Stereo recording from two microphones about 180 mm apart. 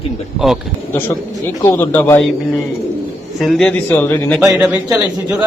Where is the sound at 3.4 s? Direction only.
Centre (ahead or behind).